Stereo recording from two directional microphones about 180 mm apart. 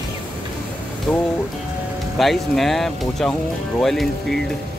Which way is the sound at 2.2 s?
Centre (ahead or behind).